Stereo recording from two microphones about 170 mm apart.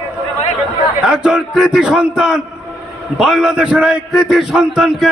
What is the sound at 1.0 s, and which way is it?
A man's voice, 5° right (ahead or behind).